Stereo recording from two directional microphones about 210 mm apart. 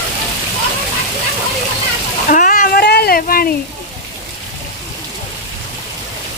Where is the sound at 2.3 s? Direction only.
40° left (ahead or behind).